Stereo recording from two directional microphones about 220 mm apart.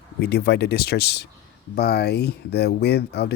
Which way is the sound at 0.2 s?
45° left (ahead or behind).